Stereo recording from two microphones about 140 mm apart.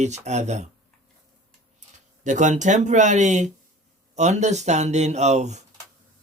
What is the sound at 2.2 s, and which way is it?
Speech, 60° right (ahead or behind).